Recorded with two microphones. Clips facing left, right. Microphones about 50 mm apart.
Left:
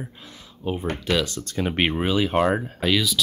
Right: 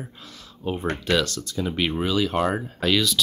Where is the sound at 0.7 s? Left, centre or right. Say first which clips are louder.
Left 1 dB; centre.